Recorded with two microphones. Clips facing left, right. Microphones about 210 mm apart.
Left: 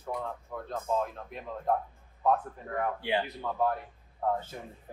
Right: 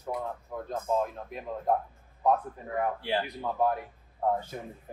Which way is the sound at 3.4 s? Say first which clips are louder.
Right 2 dB; 15° right (ahead or behind).